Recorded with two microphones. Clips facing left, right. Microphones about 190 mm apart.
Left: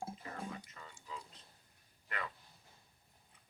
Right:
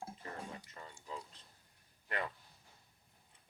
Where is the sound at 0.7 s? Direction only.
35° right (ahead or behind).